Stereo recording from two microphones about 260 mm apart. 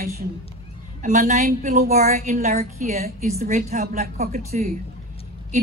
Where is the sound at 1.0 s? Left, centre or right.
Right.